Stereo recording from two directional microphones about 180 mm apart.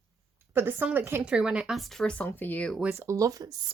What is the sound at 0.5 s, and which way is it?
A woman's voice, 10° right (ahead or behind).